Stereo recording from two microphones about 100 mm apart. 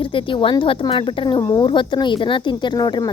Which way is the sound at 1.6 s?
55° left (ahead or behind).